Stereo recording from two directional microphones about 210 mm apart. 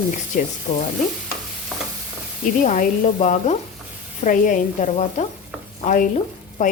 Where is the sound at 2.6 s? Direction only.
35° left (ahead or behind).